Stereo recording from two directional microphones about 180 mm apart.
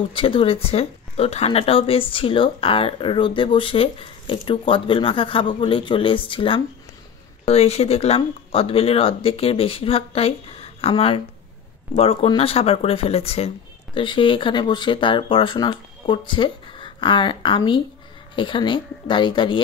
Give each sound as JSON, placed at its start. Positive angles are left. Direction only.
{"t": 0.1, "sound": "speech", "side_deg": 30}